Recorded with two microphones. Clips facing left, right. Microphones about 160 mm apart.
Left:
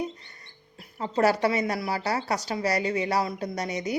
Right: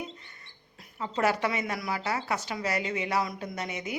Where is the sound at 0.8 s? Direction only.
35° left (ahead or behind).